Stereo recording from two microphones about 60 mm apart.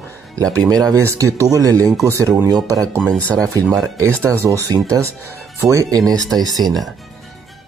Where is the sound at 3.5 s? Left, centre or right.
Right.